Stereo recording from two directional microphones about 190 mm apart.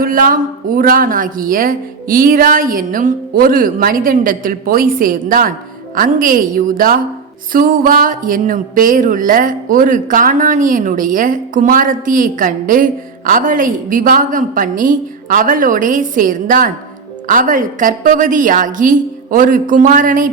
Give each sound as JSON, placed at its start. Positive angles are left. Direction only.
{"t": 0.0, "sound": "speech", "side_deg": -50}